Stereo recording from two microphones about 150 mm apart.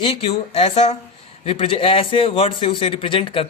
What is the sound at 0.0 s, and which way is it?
A man's voice, 40° left (ahead or behind).